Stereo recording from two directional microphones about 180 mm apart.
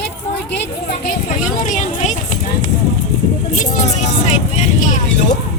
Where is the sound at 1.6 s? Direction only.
40° left (ahead or behind).